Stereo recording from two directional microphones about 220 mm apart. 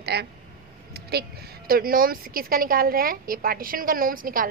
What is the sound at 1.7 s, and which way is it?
A woman's voice, 40° right (ahead or behind).